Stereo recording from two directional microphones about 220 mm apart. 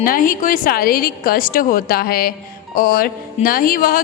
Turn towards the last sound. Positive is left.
turn(degrees=40)  # may be behind; listen again after turning